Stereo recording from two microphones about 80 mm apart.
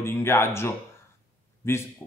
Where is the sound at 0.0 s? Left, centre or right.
Left.